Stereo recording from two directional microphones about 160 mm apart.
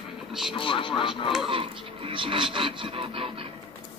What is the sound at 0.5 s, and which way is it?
Speech, 35° left (ahead or behind).